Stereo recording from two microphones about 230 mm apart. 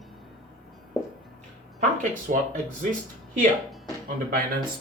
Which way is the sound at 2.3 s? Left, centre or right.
Right.